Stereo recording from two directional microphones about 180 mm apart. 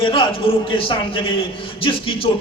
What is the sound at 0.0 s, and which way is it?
A man's voice, 30° left (ahead or behind).